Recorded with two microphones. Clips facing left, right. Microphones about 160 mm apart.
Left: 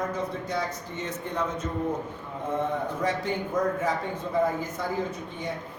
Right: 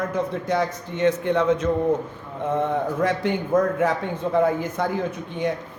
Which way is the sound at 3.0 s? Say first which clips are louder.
Right 5 dB; 70° right (ahead or behind).